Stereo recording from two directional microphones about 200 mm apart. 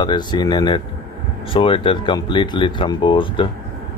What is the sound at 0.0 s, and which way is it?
Speech, 20° left (ahead or behind).